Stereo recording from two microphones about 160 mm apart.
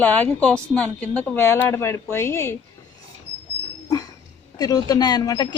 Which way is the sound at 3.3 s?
90° right.